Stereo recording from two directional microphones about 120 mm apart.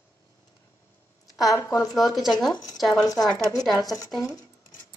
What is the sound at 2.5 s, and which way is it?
Speech, 35° left (ahead or behind).